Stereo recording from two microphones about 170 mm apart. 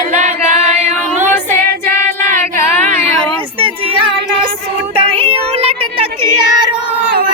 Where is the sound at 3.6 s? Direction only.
30° right (ahead or behind).